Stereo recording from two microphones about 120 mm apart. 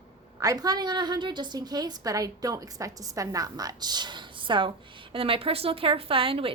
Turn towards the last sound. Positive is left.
turn(degrees=-50)  # may be behind; listen again after turning